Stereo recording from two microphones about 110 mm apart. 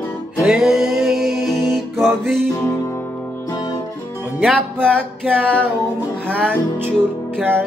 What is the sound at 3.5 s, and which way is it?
Guitar, 35° left (ahead or behind).